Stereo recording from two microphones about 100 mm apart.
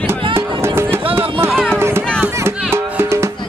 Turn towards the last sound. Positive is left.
turn(degrees=-25)  # may be behind; listen again after turning